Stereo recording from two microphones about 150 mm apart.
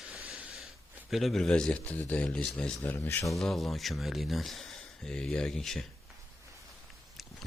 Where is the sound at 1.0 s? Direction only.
Centre (ahead or behind); by 3.3 s 15° left (ahead or behind).